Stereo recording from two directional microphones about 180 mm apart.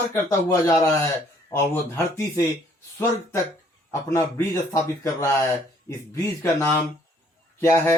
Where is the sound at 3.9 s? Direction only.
15° left (ahead or behind).